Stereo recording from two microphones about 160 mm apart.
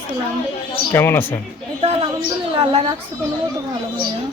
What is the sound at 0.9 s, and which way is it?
Speech, 15° left (ahead or behind).